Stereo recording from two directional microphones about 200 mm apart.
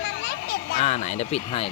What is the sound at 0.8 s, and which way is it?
Speech, 35° left (ahead or behind).